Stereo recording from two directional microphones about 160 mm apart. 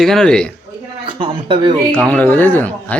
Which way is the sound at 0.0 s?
Centre (ahead or behind).